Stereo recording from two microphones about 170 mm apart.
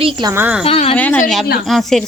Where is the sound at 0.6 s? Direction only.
35° left (ahead or behind).